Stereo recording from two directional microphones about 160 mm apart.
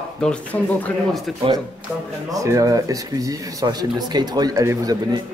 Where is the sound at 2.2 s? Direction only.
20° right (ahead or behind).